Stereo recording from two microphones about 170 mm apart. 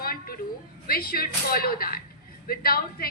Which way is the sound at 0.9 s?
60° left (ahead or behind).